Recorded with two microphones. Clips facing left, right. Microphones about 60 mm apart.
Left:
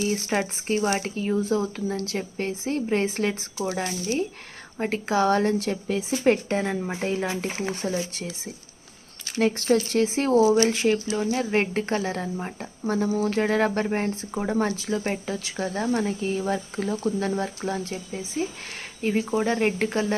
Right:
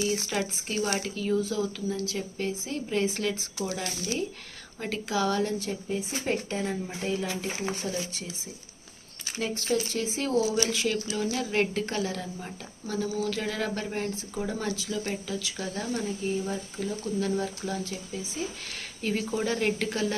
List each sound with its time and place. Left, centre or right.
0.0 s speech: left
4.8 s speech: left
5.5 s a woman's voice: left
9.4 s speech: left
10.2 s speech: left
16.0 s a woman's voice: left
17.2 s speech: left
19.0 s speech: left